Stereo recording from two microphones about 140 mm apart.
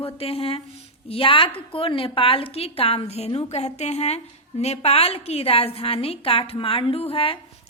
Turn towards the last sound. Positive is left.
turn(degrees=40)  # may be behind; listen again after turning